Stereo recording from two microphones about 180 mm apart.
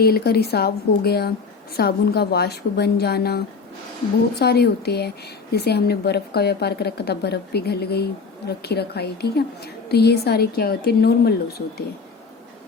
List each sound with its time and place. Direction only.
0.0 s a woman's voice: 60° left (ahead or behind)